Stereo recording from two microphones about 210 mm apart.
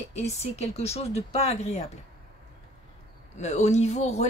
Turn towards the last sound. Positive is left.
turn(degrees=35)  # may be behind; listen again after turning